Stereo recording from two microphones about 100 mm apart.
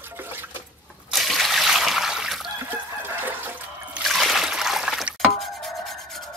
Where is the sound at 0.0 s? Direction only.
25° right (ahead or behind).